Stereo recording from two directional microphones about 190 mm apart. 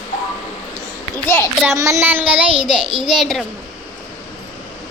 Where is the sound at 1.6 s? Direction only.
15° right (ahead or behind).